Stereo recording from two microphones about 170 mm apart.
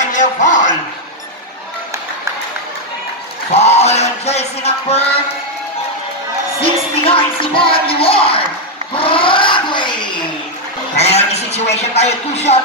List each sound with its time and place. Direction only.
0.1 s music: 45° left (ahead or behind)
3.5 s music: 40° left (ahead or behind)
6.6 s music: 30° left (ahead or behind)
8.9 s a sound: 30° left (ahead or behind)
11.0 s a sound: 40° left (ahead or behind)
11.7 s music: 40° left (ahead or behind)